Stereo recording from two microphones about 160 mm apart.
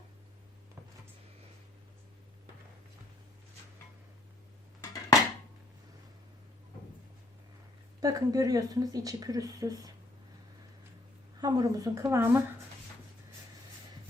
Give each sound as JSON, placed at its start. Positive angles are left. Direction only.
{"t": 8.0, "sound": "speech", "side_deg": -20}
{"t": 11.3, "sound": "speech", "side_deg": -25}